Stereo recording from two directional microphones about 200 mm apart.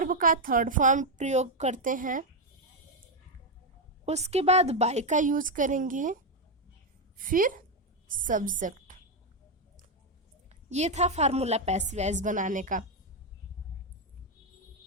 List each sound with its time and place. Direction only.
0.0 s a woman's voice: 45° right (ahead or behind)
4.0 s a woman's voice: 35° right (ahead or behind)
7.2 s a woman's voice: 45° right (ahead or behind)
10.5 s a woman's voice: 35° right (ahead or behind)